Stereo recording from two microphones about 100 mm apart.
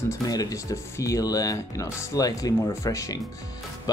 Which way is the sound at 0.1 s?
35° left (ahead or behind).